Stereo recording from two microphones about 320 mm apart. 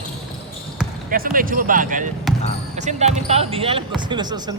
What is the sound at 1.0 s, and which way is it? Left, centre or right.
Speech, right.